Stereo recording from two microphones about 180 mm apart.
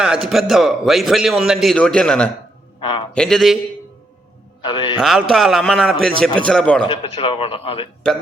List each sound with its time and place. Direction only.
0.0 s a man's voice: 5° right (ahead or behind)
4.6 s a man's voice: 25° left (ahead or behind)
4.9 s a man's voice: centre (ahead or behind)
6.8 s a man's voice: 30° left (ahead or behind)